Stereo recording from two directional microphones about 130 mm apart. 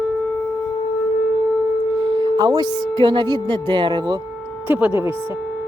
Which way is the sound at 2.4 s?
30° right (ahead or behind).